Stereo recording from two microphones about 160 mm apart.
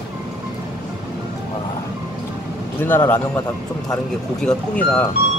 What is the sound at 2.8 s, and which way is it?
Speech, 10° left (ahead or behind).